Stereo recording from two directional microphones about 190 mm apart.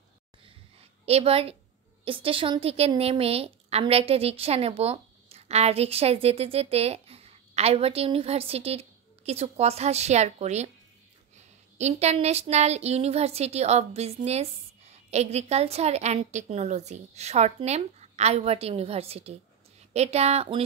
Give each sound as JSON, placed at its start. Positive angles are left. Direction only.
{"t": 1.0, "sound": "a woman's voice", "side_deg": -30}
{"t": 11.8, "sound": "a woman's voice", "side_deg": -35}